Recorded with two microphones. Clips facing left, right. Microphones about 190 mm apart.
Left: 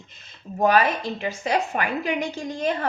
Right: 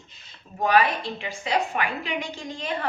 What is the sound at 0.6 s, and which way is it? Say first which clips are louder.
A woman's voice: left 2 dB; 45° left (ahead or behind).